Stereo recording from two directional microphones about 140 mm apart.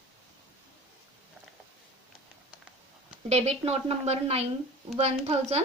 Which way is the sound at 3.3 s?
45° right (ahead or behind).